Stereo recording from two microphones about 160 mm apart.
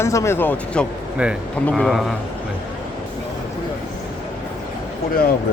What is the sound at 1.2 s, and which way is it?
Speech, 5° right (ahead or behind).